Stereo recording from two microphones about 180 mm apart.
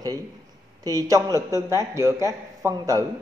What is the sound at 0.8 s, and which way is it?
A man's voice, 20° right (ahead or behind).